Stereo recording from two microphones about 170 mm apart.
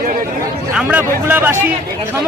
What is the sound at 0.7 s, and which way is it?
Speech, 10° right (ahead or behind).